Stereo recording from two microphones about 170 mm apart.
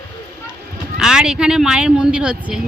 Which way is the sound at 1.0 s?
5° right (ahead or behind).